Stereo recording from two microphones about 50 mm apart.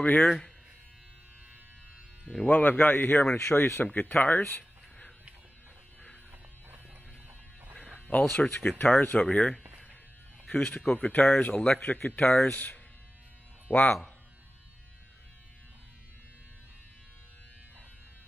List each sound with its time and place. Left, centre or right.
0.0 s speech: left
2.5 s a man's voice: left
3.3 s speech: left
3.8 s speech: left
8.1 s speech: left
10.5 s speech: left